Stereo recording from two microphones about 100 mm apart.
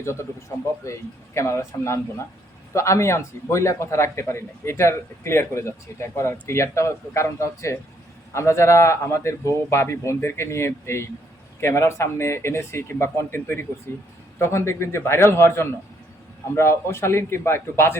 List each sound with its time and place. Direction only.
0.0 s a man's voice: 30° left (ahead or behind)